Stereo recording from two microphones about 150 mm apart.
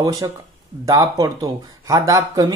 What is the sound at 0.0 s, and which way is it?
Speech, 25° right (ahead or behind).